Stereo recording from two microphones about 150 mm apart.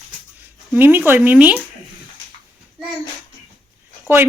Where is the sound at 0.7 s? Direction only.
15° right (ahead or behind).